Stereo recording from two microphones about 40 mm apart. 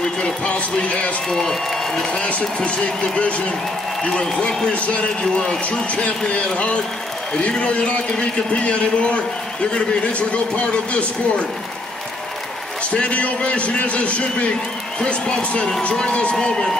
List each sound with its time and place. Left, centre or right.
0.2 s a man's voice: left
1.3 s a man's voice: centre
2.2 s a man's voice: left
4.2 s a man's voice: left
4.7 s a man's voice: left
5.2 s a man's voice: centre
5.9 s a man's voice: left
12.9 s a man's voice: left